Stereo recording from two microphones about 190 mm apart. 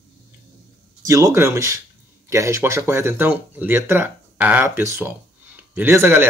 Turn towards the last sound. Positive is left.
turn(degrees=-10)  # may be behind; listen again after turning